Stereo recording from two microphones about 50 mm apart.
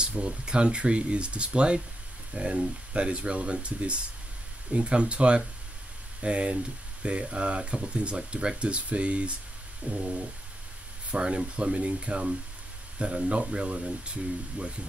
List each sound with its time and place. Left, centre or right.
0.0 s speech: centre